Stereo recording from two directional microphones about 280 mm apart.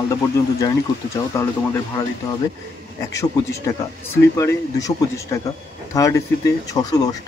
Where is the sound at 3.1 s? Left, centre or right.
Centre.